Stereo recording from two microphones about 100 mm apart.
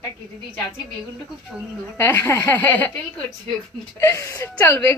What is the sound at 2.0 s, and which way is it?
A woman's voice, 25° left (ahead or behind).